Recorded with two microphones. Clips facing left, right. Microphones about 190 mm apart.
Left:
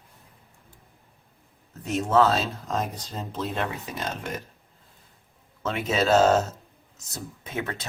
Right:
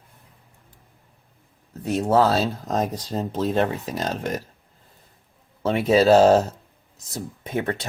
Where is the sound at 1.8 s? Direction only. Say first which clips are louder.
Right 2 dB; 35° right (ahead or behind).